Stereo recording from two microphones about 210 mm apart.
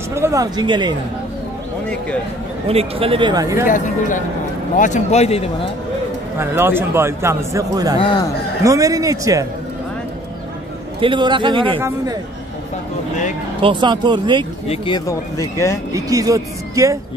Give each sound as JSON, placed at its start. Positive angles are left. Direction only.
{"t": 0.1, "sound": "speech", "side_deg": -15}
{"t": 2.7, "sound": "speech", "side_deg": -30}
{"t": 3.6, "sound": "speech", "side_deg": 40}
{"t": 6.4, "sound": "a man's voice", "side_deg": -10}
{"t": 11.0, "sound": "speech", "side_deg": -25}
{"t": 13.6, "sound": "speech", "side_deg": -25}
{"t": 15.0, "sound": "speech", "side_deg": 15}
{"t": 15.9, "sound": "a man's voice", "side_deg": -15}